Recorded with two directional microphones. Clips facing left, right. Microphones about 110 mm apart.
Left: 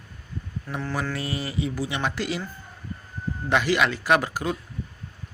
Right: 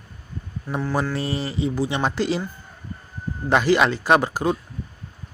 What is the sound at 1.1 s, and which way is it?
Speech, 30° right (ahead or behind).